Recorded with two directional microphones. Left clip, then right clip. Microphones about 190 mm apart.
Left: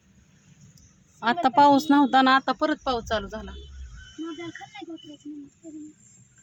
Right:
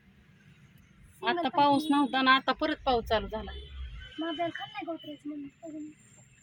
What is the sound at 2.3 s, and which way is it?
Speech, 20° left (ahead or behind).